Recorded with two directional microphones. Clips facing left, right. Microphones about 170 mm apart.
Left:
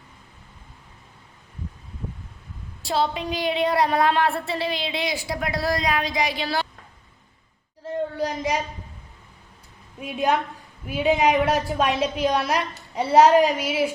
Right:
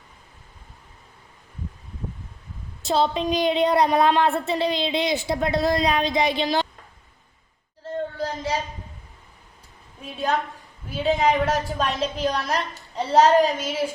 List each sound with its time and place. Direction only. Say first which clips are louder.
2.8 s speech: right 3 dB; 25° right (ahead or behind)
7.9 s a sound: left 2 dB; 15° left (ahead or behind)
10.0 s a woman's voice: left 2 dB; 10° left (ahead or behind)